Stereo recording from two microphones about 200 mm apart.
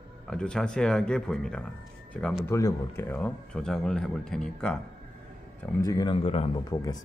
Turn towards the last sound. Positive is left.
turn(degrees=30)  # may be behind; listen again after turning